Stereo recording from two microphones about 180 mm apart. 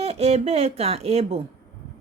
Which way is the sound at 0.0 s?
35° right (ahead or behind).